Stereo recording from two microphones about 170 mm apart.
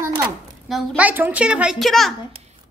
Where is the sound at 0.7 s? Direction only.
Centre (ahead or behind).